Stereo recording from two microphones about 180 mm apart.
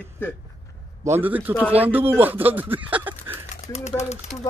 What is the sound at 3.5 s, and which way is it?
Speech, 40° left (ahead or behind).